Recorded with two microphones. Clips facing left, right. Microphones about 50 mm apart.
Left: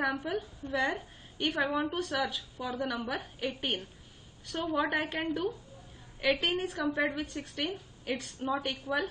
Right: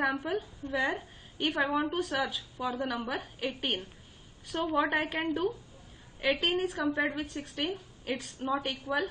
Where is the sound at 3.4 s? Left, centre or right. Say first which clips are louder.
Right 1 dB; right.